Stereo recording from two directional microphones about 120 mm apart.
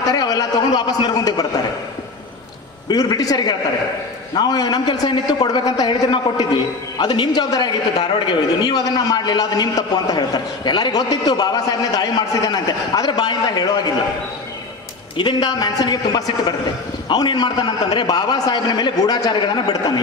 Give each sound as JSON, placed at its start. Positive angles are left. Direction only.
{"t": 0.1, "sound": "a man's voice", "side_deg": 30}
{"t": 2.9, "sound": "a man's voice", "side_deg": 30}
{"t": 15.1, "sound": "a man's voice", "side_deg": 40}